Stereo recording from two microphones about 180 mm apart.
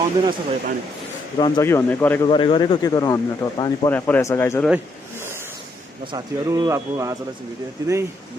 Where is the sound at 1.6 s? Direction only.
15° left (ahead or behind).